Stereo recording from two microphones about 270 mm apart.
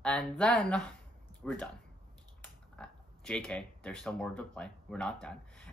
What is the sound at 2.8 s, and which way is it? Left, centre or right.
Speech, centre.